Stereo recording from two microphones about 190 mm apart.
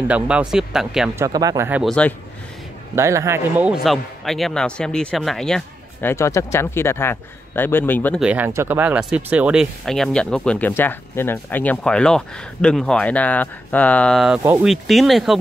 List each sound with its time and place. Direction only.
0.1 s a man's voice: 5° right (ahead or behind)
1.1 s speech: 15° right (ahead or behind)
1.7 s a man's voice: centre (ahead or behind)
3.0 s a man's voice: 15° right (ahead or behind); by 8.2 s 10° left (ahead or behind)
8.2 s a man's voice: 10° right (ahead or behind)
14.4 s speech: 15° right (ahead or behind)
14.7 s a man's voice: centre (ahead or behind)